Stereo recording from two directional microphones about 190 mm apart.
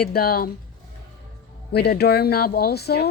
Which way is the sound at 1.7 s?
60° left (ahead or behind).